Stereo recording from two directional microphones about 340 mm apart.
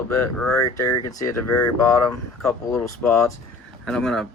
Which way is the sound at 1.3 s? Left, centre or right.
Left.